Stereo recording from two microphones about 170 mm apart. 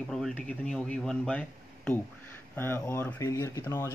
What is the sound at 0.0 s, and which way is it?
Speech, 5° left (ahead or behind).